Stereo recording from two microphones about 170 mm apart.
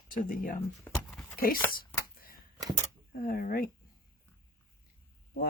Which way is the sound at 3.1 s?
55° left (ahead or behind).